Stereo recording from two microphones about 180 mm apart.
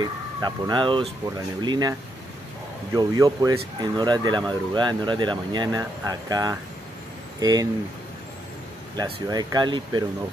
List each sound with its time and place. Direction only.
0.0 s speech: 25° right (ahead or behind)
8.9 s speech: 20° right (ahead or behind)